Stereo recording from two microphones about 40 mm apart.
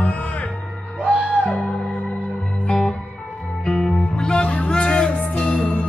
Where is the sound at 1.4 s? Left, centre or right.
Centre.